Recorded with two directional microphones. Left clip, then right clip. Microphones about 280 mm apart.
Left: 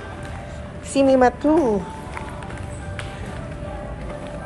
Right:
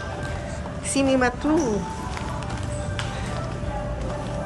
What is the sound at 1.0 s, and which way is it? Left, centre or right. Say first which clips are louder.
Speech: left 6 dB; centre.